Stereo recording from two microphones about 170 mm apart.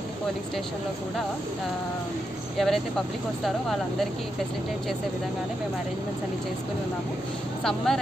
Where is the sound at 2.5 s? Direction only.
Centre (ahead or behind).